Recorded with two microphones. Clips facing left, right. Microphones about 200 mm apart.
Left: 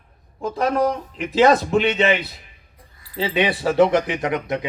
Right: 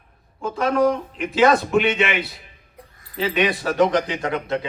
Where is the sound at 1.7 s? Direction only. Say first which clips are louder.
Left 1 dB; 35° left (ahead or behind).